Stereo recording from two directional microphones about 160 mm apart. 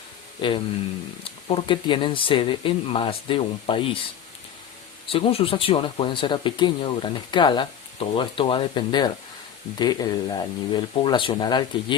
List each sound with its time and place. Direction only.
0.4 s speech: 30° left (ahead or behind)
5.0 s speech: 35° left (ahead or behind)